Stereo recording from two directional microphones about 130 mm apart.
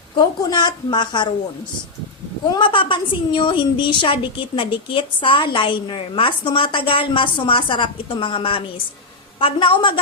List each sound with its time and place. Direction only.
0.4 s a woman's voice: 35° left (ahead or behind)
2.5 s a woman's voice: 40° left (ahead or behind)